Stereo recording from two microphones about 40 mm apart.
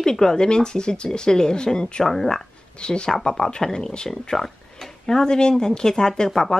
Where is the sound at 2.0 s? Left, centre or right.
Centre.